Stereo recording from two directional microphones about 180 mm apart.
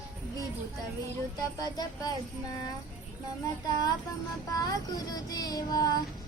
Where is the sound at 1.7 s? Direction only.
20° left (ahead or behind).